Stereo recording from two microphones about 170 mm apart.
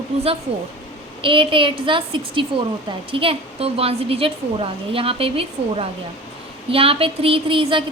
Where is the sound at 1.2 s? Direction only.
30° right (ahead or behind).